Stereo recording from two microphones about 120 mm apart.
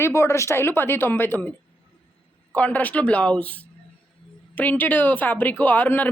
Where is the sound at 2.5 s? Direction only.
10° left (ahead or behind).